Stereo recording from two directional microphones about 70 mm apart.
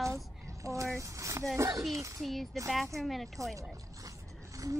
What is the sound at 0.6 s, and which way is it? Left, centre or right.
Speech, right.